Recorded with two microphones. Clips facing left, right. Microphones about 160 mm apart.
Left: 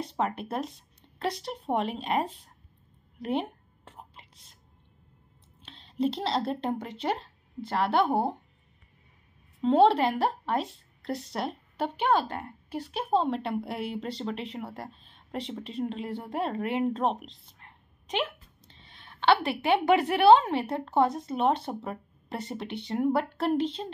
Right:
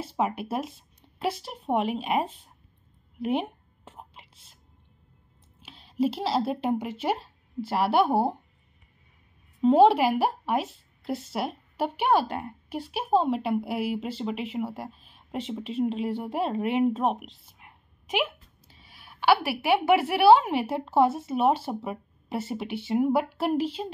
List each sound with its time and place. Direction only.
0.0 s speech: 10° right (ahead or behind)
3.3 s a sound: 10° right (ahead or behind)
4.1 s whispering: 25° right (ahead or behind)
5.6 s a woman's voice: 5° right (ahead or behind)
9.6 s speech: 5° right (ahead or behind)
16.1 s speech: 30° right (ahead or behind)
16.9 s a sound: 5° right (ahead or behind)
19.6 s speech: 5° right (ahead or behind)